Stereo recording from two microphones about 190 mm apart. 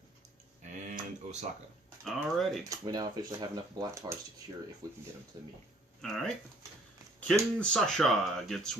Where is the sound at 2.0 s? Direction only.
Centre (ahead or behind).